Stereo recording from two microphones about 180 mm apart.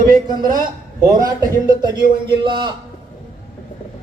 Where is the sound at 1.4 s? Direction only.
25° right (ahead or behind).